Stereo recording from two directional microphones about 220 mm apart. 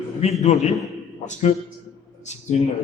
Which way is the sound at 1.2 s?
30° left (ahead or behind).